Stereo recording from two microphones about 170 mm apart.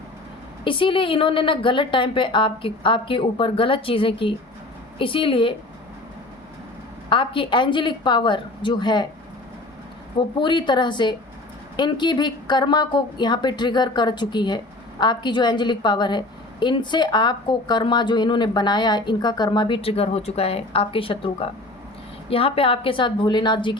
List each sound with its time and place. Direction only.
0.6 s a woman's voice: 30° left (ahead or behind)
7.1 s speech: 30° left (ahead or behind)
10.2 s speech: 30° left (ahead or behind)